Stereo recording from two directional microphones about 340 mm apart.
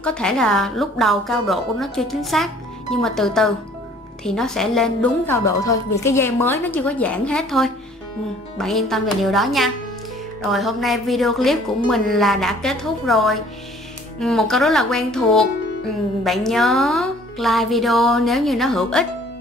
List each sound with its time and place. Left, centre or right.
0.0 s speech: centre